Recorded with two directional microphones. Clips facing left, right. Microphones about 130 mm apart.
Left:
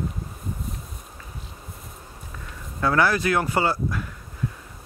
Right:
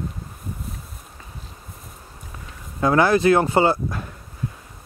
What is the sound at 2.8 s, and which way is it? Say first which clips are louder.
Speech: right 5 dB; 20° right (ahead or behind).